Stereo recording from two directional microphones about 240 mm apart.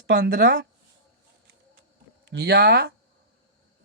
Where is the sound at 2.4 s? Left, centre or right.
Right.